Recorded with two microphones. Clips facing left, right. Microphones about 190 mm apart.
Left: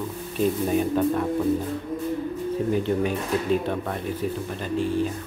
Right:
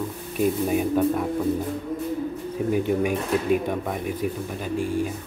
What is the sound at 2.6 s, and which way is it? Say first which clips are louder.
Speech: right 3 dB; 10° right (ahead or behind).